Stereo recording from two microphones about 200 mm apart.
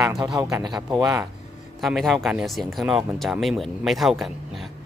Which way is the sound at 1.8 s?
Centre (ahead or behind).